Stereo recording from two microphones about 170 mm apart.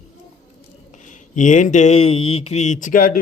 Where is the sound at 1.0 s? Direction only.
45° left (ahead or behind).